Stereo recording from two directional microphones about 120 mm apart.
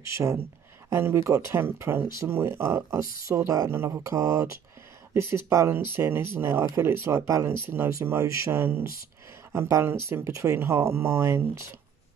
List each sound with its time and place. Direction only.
0.0 s speech: 25° right (ahead or behind)